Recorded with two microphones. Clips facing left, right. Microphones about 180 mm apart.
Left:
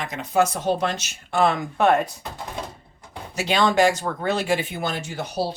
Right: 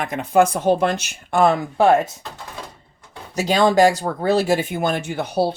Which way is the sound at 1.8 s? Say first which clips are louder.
Right 3 dB; 25° right (ahead or behind).